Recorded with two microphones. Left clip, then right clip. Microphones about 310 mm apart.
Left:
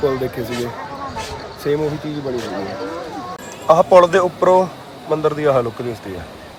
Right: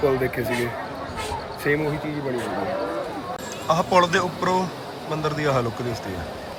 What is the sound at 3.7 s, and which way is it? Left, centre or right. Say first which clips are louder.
A man's voice: left 9 dB; centre.